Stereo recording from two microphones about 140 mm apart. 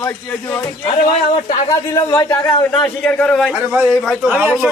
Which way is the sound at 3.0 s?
5° left (ahead or behind).